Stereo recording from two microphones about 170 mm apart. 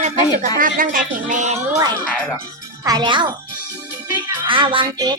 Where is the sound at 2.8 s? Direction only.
25° right (ahead or behind).